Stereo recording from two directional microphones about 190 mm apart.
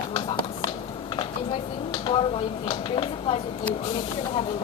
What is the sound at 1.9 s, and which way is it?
A woman's voice, 25° left (ahead or behind).